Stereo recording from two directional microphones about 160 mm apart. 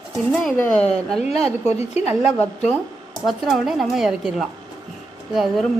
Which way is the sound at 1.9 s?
40° left (ahead or behind).